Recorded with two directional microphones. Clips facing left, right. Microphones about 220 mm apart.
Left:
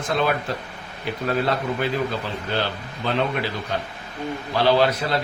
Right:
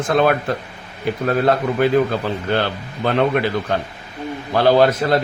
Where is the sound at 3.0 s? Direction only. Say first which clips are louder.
Right 7 dB; 55° right (ahead or behind).